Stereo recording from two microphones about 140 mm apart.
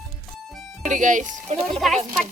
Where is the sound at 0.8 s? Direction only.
60° right (ahead or behind).